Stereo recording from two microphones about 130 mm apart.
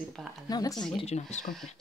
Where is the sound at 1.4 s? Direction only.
Centre (ahead or behind).